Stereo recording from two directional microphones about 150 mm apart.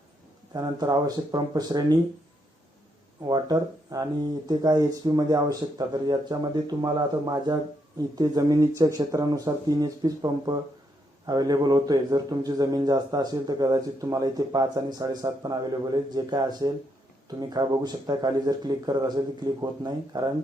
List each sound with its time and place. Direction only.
0.5 s a man's voice: 25° right (ahead or behind)
3.2 s a man's voice: 25° right (ahead or behind)